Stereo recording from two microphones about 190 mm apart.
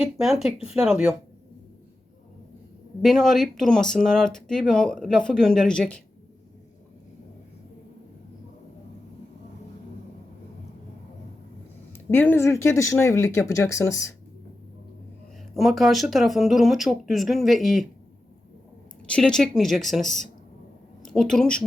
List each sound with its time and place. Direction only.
0.0 s speech: centre (ahead or behind)
3.0 s speech: centre (ahead or behind)
12.1 s speech: 10° left (ahead or behind)
15.5 s speech: centre (ahead or behind)
19.0 s speech: 5° left (ahead or behind)